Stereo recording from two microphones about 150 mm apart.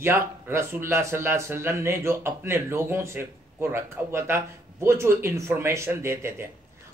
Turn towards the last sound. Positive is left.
turn(degrees=-15)  # may be behind; listen again after turning